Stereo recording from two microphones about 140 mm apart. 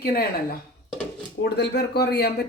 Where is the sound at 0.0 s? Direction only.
90° left.